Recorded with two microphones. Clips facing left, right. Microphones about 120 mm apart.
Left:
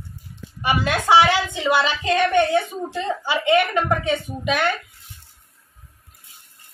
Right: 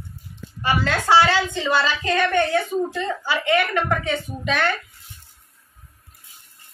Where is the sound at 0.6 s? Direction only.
15° left (ahead or behind).